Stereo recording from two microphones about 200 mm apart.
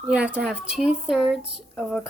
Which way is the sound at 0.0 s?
5° right (ahead or behind).